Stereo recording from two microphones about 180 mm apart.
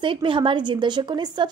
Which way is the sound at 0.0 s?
30° right (ahead or behind).